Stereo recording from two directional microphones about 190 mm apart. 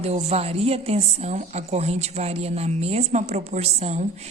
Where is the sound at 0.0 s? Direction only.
35° right (ahead or behind).